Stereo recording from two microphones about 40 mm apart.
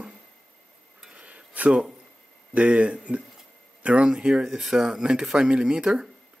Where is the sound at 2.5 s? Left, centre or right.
Right.